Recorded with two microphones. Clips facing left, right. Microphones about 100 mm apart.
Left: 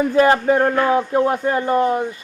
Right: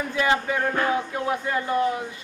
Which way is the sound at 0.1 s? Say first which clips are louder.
Left 7 dB; 45° left (ahead or behind).